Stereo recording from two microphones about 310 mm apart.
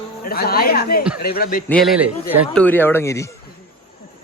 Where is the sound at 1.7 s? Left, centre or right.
Centre.